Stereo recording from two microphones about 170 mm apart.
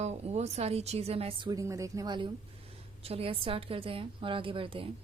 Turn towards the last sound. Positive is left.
turn(degrees=-30)  # may be behind; listen again after turning